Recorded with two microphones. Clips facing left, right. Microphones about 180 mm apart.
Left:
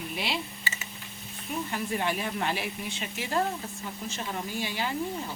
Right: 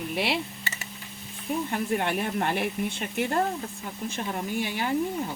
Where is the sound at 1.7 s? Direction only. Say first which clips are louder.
Right 2 dB; 55° right (ahead or behind).